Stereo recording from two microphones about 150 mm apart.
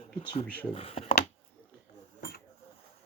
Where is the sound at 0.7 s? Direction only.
40° left (ahead or behind).